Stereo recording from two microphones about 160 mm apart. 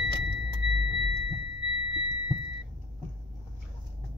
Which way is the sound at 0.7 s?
30° right (ahead or behind).